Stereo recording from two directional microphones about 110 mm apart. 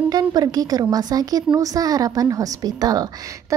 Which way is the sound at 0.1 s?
35° right (ahead or behind).